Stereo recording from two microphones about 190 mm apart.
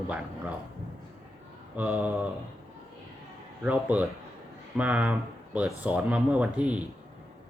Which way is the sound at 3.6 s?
10° right (ahead or behind).